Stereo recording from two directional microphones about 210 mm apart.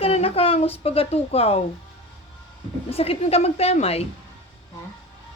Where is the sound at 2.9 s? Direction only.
30° left (ahead or behind).